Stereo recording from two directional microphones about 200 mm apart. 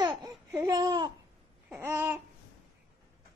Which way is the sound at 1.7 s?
10° right (ahead or behind).